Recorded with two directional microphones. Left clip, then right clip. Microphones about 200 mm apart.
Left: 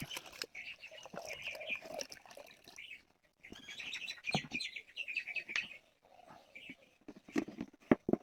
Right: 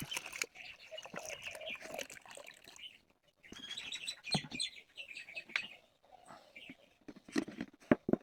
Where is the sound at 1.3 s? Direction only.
20° right (ahead or behind).